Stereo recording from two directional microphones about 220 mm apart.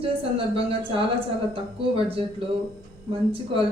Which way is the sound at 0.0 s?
25° right (ahead or behind).